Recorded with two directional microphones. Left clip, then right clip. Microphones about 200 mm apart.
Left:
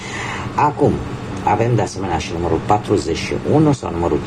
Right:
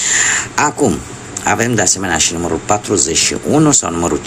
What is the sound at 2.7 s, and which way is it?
Speech, 35° right (ahead or behind).